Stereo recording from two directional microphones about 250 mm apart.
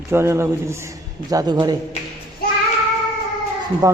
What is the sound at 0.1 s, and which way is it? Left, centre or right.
A man's voice, centre.